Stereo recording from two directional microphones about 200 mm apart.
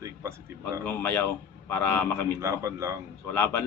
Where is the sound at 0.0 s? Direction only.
15° right (ahead or behind).